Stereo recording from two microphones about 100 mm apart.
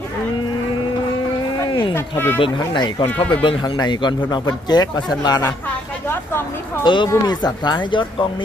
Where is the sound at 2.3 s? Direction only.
55° left (ahead or behind); by 5.5 s 40° left (ahead or behind).